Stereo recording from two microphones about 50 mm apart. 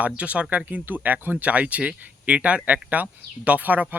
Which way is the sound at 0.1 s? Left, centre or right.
Right.